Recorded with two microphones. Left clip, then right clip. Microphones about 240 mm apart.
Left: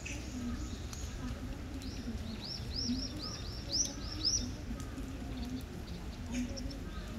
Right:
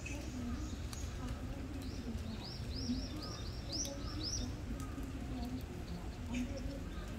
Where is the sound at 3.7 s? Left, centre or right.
Right.